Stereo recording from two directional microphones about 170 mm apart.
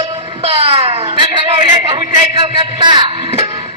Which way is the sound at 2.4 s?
30° right (ahead or behind).